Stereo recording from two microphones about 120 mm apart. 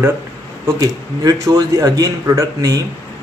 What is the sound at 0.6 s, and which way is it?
Speech, 25° right (ahead or behind).